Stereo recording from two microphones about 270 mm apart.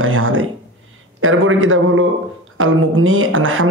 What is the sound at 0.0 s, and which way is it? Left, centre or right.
Speech, right.